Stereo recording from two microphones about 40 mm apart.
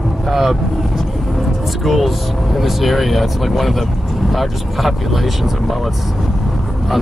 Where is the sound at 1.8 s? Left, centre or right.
Centre.